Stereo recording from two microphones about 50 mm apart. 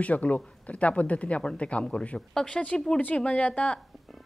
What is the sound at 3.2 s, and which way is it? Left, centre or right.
Speech, left.